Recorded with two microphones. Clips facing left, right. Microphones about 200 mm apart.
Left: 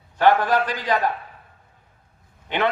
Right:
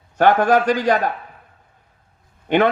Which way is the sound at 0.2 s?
45° right (ahead or behind).